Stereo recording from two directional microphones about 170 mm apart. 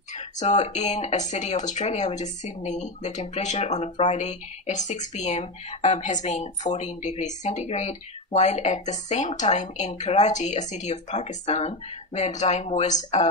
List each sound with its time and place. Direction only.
0.1 s speech: 45° left (ahead or behind)